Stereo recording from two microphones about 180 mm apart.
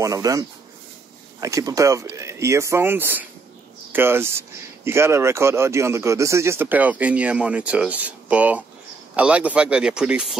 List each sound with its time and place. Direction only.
0.0 s speech: 20° right (ahead or behind)